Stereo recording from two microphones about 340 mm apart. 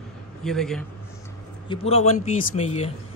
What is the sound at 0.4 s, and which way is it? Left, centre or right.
Speech, centre.